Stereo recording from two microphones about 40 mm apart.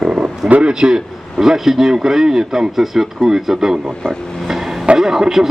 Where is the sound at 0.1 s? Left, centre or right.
Right.